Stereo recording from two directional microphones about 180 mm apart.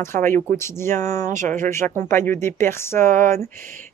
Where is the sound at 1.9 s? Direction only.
15° left (ahead or behind).